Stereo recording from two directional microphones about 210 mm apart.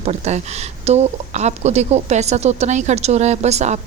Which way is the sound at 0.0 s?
30° right (ahead or behind).